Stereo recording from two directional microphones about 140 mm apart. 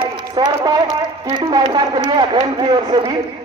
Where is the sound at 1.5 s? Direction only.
35° right (ahead or behind).